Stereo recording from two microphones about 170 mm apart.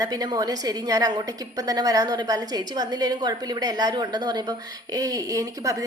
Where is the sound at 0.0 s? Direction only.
25° right (ahead or behind).